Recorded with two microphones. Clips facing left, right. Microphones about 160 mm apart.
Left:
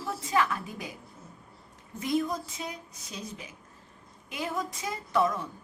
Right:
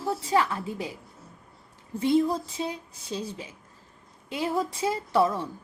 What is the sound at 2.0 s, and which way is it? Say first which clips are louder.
A woman's voice: right 6 dB; 30° right (ahead or behind).